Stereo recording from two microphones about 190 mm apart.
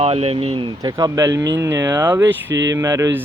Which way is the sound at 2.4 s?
75° right (ahead or behind).